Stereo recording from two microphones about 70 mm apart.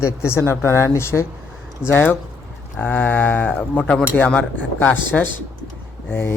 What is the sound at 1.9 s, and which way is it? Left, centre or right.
Speech, left.